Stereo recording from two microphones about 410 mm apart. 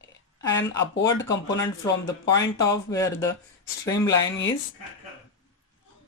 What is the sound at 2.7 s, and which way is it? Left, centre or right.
Speech, centre.